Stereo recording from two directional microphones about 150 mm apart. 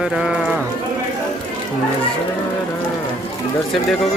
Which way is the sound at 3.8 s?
5° left (ahead or behind).